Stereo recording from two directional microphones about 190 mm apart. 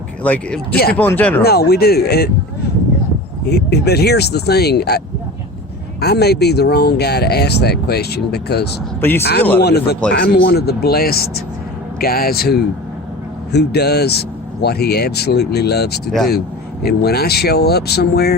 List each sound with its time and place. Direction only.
0.2 s speech: 10° left (ahead or behind)
1.5 s speech: 55° left (ahead or behind)
3.5 s speech: 60° left (ahead or behind)
9.0 s speech: 10° left (ahead or behind)
9.6 s speech: 60° left (ahead or behind)